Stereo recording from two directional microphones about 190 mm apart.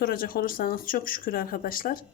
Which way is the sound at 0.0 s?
50° left (ahead or behind).